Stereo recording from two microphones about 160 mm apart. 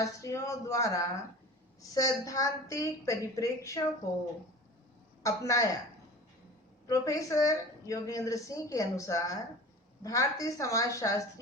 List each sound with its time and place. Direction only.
0.0 s a woman's voice: 20° left (ahead or behind)
5.2 s a woman's voice: 20° left (ahead or behind)
6.8 s a woman's voice: 20° left (ahead or behind)